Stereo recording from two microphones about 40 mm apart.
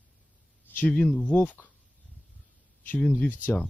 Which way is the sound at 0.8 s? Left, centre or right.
Left.